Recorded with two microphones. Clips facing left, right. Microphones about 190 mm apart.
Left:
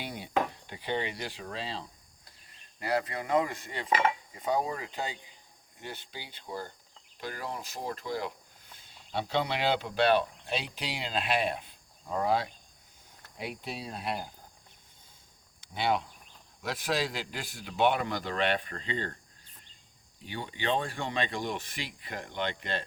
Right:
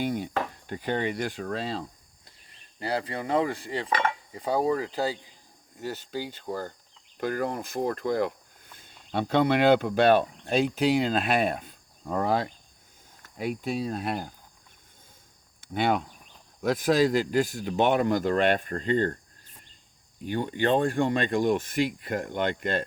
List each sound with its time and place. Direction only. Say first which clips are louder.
0.0 s a man's voice: right 3 dB; 45° right (ahead or behind)
2.2 s speech: right 2 dB; 30° right (ahead or behind)
3.9 s cutlery: left 1 dB; 10° left (ahead or behind)
4.4 s a man's voice: right 10 dB; 35° right (ahead or behind); by 14.3 s 50° right (ahead or behind)
15.6 s a man's voice: right 4 dB; 50° right (ahead or behind)
20.2 s a man's voice: right 8 dB; 50° right (ahead or behind)